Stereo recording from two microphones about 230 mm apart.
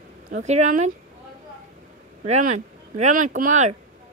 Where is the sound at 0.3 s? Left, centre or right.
Right.